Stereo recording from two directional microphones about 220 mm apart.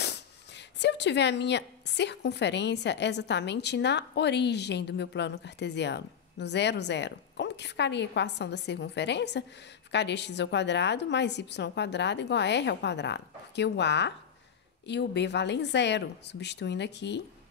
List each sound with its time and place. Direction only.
0.0 s speech: 50° left (ahead or behind)